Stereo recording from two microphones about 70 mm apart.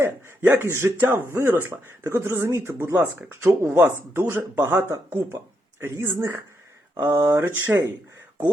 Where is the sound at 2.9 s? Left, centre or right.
Right.